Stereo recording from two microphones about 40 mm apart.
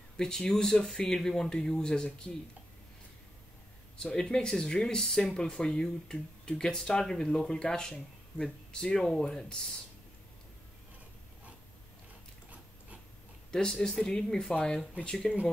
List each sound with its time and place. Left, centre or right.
0.2 s speech: centre
4.0 s speech: centre
13.5 s speech: centre
15.3 s speech: centre